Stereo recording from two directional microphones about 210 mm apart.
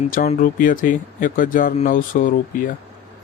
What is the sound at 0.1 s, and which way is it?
Speech, 40° left (ahead or behind).